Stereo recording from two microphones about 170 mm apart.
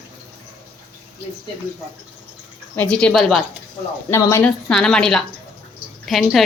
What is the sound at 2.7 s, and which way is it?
Speech, 5° left (ahead or behind).